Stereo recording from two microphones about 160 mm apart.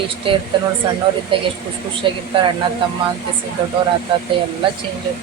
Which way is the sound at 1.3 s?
30° right (ahead or behind).